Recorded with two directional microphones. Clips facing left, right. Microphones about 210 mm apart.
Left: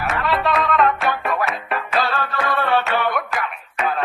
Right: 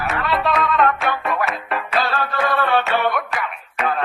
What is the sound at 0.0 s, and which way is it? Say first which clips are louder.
Music: even; centre (ahead or behind).